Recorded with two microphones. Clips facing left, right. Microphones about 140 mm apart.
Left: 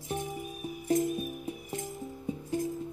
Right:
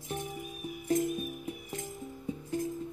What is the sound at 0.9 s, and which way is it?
Music, 35° left (ahead or behind).